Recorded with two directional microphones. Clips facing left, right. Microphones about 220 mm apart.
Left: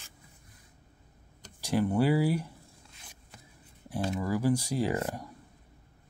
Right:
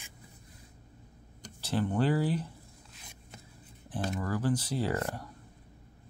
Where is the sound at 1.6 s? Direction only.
10° left (ahead or behind).